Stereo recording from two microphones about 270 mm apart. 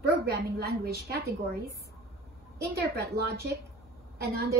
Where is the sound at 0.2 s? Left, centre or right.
Right.